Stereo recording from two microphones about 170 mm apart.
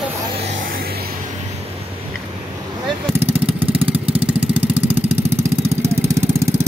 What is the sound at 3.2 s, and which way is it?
Vehicle, 35° right (ahead or behind).